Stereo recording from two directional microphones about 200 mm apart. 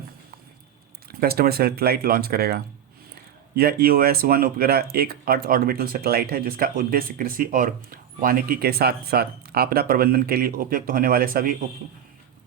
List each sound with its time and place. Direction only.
1.2 s speech: 50° right (ahead or behind)